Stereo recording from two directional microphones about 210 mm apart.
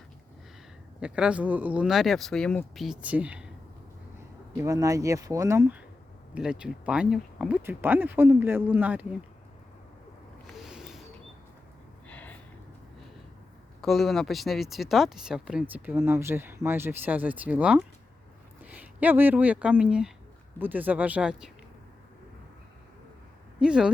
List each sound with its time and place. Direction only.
0.9 s speech: 5° right (ahead or behind)
4.5 s speech: 15° right (ahead or behind)
10.4 s a sound: centre (ahead or behind)
12.0 s gasp: 5° left (ahead or behind)
13.8 s speech: centre (ahead or behind)
23.6 s speech: 5° right (ahead or behind)